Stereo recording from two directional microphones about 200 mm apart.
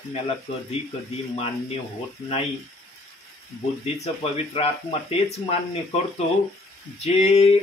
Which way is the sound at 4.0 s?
30° left (ahead or behind).